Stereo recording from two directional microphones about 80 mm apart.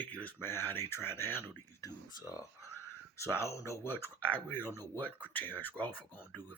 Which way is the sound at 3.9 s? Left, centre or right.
Left.